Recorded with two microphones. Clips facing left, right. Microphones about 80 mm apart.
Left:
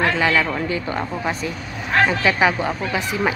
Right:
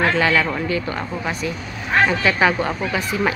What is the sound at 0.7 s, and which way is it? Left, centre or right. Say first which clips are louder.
Speech: even; left.